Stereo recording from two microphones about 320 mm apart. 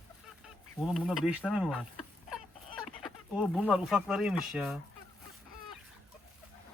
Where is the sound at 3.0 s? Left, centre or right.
Centre.